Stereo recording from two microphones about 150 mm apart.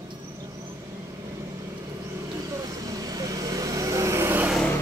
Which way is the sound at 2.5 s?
25° right (ahead or behind).